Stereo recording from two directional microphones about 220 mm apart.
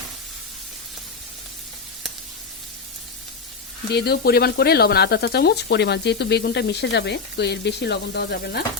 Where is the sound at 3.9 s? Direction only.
45° left (ahead or behind).